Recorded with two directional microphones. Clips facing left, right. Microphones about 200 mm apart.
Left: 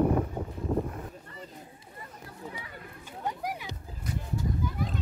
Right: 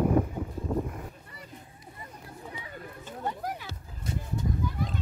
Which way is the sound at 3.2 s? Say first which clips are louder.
Even; 15° left (ahead or behind).